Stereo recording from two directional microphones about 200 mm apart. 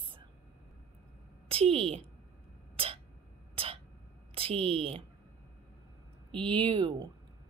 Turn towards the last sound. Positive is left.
turn(degrees=-25)  # may be behind; listen again after turning